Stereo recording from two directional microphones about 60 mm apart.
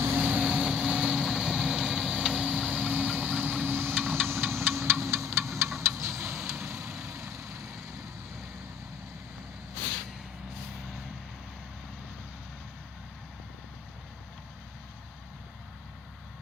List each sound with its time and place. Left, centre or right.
0.2 s vehicle: right
6.0 s a sound: right
6.5 s vehicle: right